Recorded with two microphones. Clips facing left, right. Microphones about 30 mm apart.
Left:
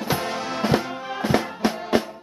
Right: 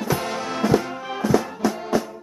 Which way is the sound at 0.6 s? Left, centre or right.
Left.